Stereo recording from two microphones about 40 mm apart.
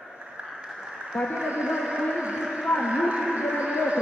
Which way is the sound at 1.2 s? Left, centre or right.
Centre.